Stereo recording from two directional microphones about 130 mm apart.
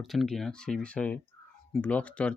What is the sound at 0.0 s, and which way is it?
Speech, centre (ahead or behind).